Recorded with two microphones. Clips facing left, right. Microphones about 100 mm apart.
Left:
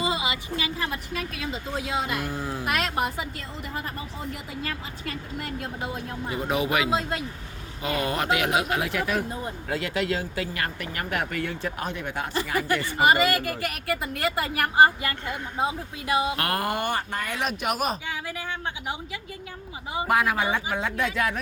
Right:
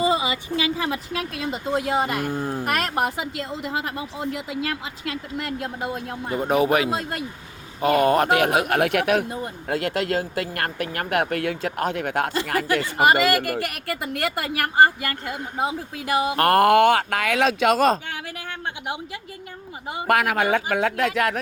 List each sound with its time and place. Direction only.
1.1 s speech: 80° right
16.3 s speech: 45° right (ahead or behind)
16.6 s speech: 90° right
20.1 s speech: 75° right (ahead or behind)